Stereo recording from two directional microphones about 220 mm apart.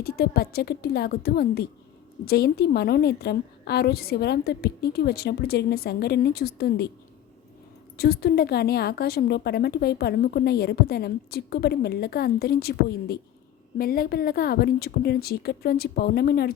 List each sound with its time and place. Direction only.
0.0 s a woman's voice: 45° left (ahead or behind)
7.9 s a woman's voice: 45° left (ahead or behind)